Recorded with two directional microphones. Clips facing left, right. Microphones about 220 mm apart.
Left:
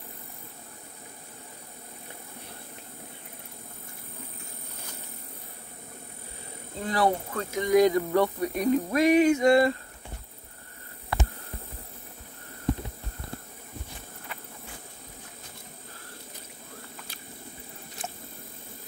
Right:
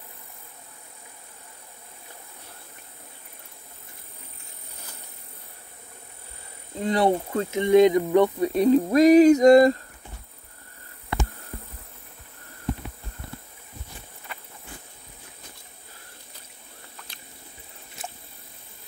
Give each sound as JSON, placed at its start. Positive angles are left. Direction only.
{"t": 6.8, "sound": "speech", "side_deg": -25}